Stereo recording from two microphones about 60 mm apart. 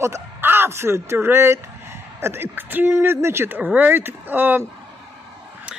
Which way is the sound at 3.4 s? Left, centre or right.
Right.